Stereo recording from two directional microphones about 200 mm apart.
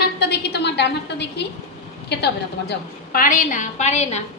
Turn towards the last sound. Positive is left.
turn(degrees=35)  # may be behind; listen again after turning